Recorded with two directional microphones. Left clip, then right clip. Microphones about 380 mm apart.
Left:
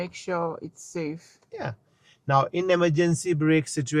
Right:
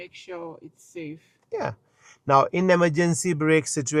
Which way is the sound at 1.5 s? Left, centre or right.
Right.